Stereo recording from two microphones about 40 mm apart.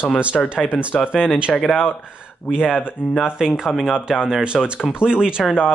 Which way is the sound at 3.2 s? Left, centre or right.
Centre.